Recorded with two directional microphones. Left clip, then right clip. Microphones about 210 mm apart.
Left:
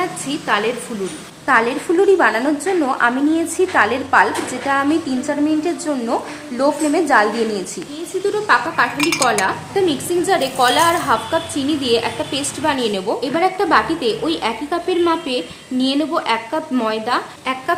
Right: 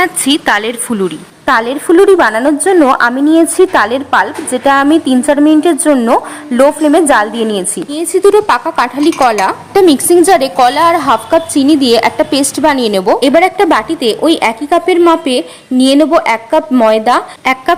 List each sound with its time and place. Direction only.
0.0 s a woman's voice: 50° right (ahead or behind)
8.3 s speech: 45° right (ahead or behind)